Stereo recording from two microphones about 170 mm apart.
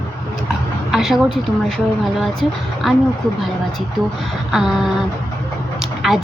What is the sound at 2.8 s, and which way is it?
Speech, centre (ahead or behind).